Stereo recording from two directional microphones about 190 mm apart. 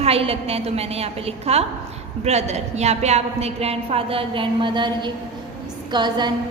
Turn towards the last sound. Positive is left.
turn(degrees=-25)  # may be behind; listen again after turning